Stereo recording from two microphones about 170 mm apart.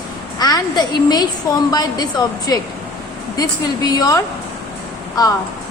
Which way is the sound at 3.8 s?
25° left (ahead or behind).